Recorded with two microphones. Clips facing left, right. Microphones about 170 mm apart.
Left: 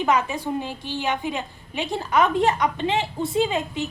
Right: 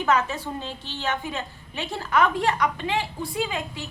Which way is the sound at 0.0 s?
15° left (ahead or behind).